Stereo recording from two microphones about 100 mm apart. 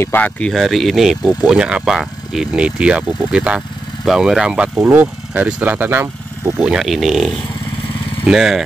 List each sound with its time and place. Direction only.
0.0 s speech: 15° left (ahead or behind)
0.5 s speech: centre (ahead or behind)
4.7 s speech: 20° right (ahead or behind)
6.4 s speech: 5° right (ahead or behind)